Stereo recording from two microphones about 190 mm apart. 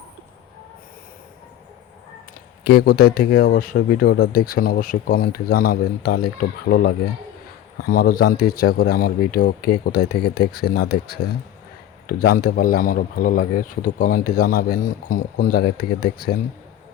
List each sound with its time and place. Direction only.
2.6 s speech: 55° left (ahead or behind)